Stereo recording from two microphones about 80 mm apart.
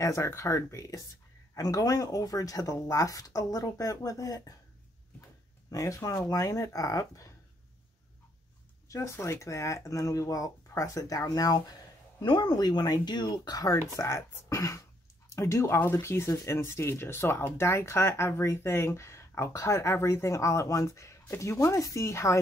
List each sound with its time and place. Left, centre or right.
0.0 s speech: left
5.7 s speech: left
8.8 s speech: left
12.2 s speech: left